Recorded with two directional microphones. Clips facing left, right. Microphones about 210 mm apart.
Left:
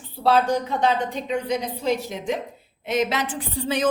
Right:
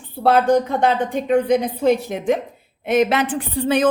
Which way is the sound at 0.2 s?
55° right (ahead or behind).